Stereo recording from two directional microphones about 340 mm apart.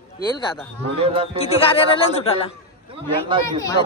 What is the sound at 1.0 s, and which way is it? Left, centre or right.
Speech, centre.